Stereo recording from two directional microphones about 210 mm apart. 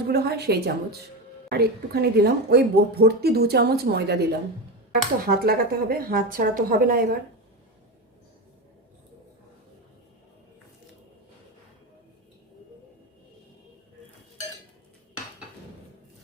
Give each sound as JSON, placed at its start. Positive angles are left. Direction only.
{"t": 0.1, "sound": "speech", "side_deg": -50}